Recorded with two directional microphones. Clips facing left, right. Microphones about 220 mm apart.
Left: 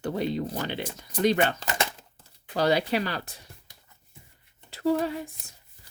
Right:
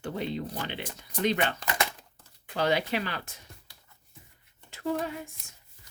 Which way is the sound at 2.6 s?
35° left (ahead or behind).